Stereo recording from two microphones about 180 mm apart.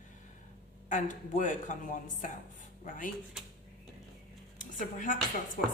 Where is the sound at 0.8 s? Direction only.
45° left (ahead or behind).